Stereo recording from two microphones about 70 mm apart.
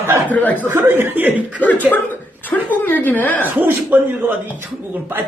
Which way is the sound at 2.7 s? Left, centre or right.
Left.